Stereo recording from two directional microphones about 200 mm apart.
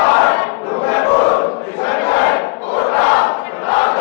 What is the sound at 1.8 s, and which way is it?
Battle cry, 10° left (ahead or behind).